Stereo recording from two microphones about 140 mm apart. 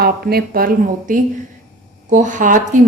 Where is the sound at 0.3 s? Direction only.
90° right.